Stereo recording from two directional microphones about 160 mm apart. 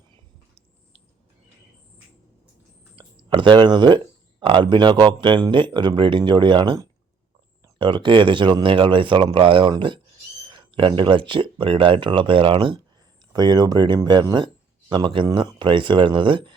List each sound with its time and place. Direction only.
2.9 s speech: 30° right (ahead or behind)